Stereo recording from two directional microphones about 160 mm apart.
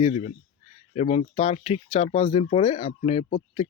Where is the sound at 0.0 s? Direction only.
45° left (ahead or behind).